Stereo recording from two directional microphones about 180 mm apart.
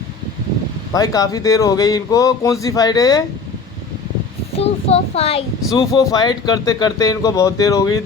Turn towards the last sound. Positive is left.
turn(degrees=20)  # may be behind; listen again after turning